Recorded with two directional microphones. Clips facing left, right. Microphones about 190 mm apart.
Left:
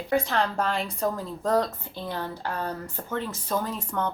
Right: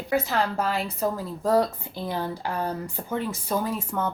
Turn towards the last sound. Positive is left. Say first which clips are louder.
# right 2 dB
turn(degrees=-10)  # may be behind; listen again after turning